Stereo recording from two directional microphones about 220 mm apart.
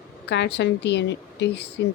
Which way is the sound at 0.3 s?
50° left (ahead or behind).